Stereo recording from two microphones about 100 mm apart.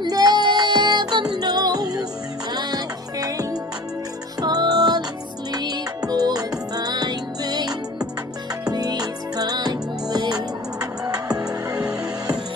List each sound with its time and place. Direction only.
0.0 s music: 40° right (ahead or behind)